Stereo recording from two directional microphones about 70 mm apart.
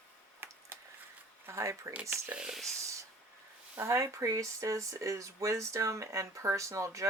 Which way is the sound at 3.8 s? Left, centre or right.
Right.